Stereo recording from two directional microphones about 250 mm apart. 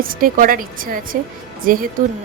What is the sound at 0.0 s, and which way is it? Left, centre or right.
A woman's voice, right.